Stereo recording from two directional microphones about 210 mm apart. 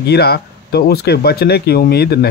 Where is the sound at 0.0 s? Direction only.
50° left (ahead or behind).